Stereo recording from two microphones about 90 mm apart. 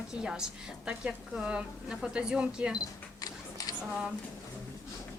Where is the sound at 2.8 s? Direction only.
45° left (ahead or behind).